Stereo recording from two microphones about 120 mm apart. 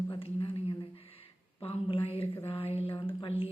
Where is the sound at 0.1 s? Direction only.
50° left (ahead or behind).